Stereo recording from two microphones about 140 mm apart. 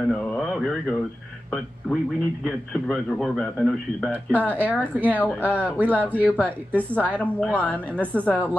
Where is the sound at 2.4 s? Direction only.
5° left (ahead or behind).